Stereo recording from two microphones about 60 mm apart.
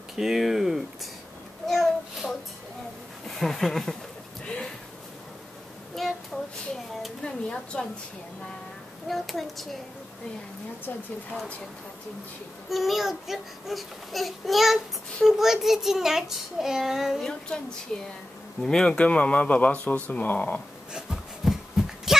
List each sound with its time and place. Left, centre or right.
0.2 s a child's voice: centre
1.7 s a sound: centre
3.3 s speech: centre
5.9 s child singing: centre
7.2 s a woman's voice: centre
9.0 s a child's voice: centre
12.6 s a child's voice: centre
17.3 s a woman's voice: centre
20.9 s a sound: centre